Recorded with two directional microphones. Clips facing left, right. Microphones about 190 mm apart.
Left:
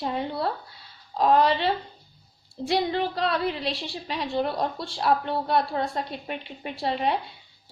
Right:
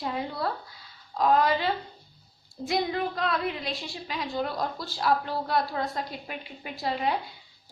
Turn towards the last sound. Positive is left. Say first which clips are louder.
# left 3 dB
turn(degrees=25)  # may be behind; listen again after turning